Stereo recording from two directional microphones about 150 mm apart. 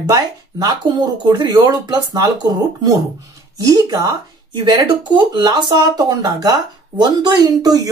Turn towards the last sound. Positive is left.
turn(degrees=-25)  # may be behind; listen again after turning